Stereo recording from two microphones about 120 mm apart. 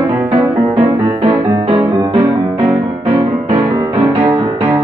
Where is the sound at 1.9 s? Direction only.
25° right (ahead or behind).